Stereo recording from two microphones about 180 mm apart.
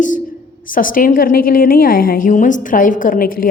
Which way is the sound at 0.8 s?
50° left (ahead or behind).